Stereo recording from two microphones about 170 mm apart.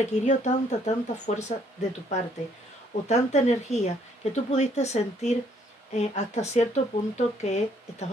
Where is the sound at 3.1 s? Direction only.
40° left (ahead or behind).